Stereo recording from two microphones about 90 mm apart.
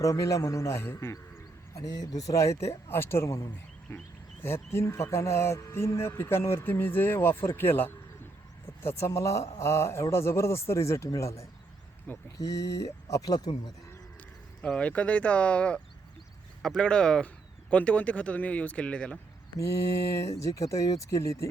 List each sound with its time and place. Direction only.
0.0 s speech: 35° left (ahead or behind)
12.1 s speech: 20° left (ahead or behind)
12.4 s speech: 40° left (ahead or behind)
14.6 s speech: 15° left (ahead or behind)
20.2 s speech: 35° left (ahead or behind)